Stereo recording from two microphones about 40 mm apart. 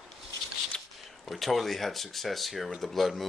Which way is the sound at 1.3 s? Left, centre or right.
Centre.